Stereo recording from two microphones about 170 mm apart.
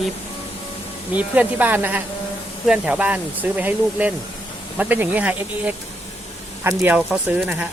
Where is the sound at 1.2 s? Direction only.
10° right (ahead or behind).